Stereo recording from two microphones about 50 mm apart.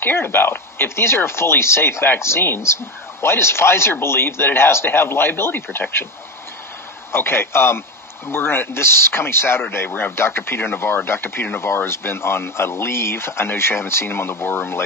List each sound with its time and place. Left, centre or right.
0.0 s speech: left
7.1 s speech: left